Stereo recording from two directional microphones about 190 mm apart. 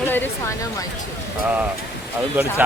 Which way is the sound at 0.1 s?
10° left (ahead or behind).